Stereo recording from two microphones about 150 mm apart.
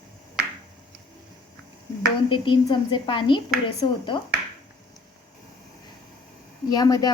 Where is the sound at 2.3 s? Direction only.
35° left (ahead or behind).